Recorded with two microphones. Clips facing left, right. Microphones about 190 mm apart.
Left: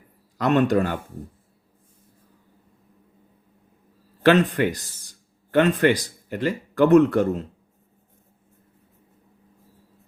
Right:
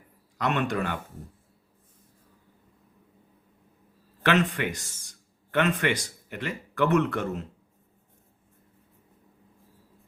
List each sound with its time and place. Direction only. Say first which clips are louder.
0.3 s a man's voice: left 8 dB; 35° left (ahead or behind)
4.2 s a man's voice: left 7 dB; 35° left (ahead or behind)